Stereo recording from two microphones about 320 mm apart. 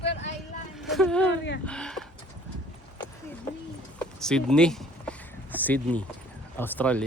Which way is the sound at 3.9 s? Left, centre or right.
Centre.